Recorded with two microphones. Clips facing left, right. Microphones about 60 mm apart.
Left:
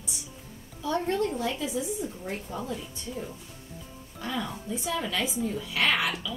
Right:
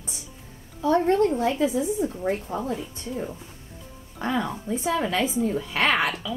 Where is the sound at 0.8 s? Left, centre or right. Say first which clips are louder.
Right 7 dB; right.